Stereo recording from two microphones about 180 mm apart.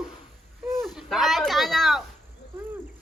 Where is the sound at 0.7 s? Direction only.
Centre (ahead or behind).